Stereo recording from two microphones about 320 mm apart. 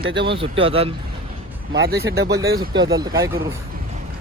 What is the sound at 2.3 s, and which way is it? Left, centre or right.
Speech, centre.